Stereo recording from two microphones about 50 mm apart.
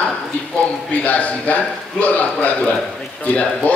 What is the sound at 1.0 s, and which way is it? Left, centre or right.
A man's voice, left.